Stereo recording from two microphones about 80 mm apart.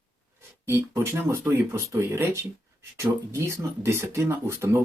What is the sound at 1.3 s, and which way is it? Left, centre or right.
Speech, right.